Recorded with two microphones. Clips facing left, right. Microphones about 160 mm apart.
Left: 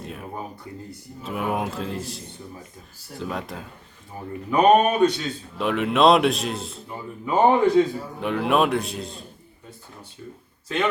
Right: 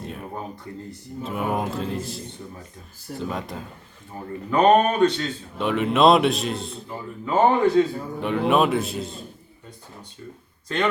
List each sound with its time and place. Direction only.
0.0 s a man's voice: centre (ahead or behind)
5.6 s a man's voice: centre (ahead or behind)
7.3 s speech: 15° left (ahead or behind)
8.2 s a man's voice: centre (ahead or behind)
10.7 s a man's voice: 5° left (ahead or behind)